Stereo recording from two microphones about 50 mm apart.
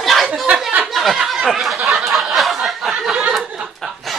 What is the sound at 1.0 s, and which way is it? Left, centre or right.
Snicker, centre.